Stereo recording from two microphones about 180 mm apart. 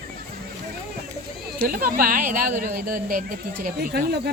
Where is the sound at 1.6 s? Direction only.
50° right (ahead or behind).